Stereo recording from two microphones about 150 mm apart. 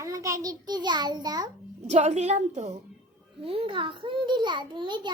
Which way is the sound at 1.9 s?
45° right (ahead or behind).